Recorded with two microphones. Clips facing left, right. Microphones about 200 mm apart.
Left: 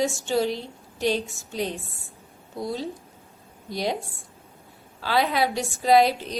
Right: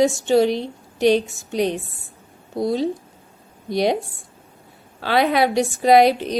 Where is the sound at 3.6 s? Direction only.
70° right (ahead or behind).